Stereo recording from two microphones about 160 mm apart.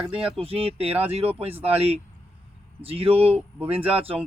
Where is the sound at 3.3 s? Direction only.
10° right (ahead or behind).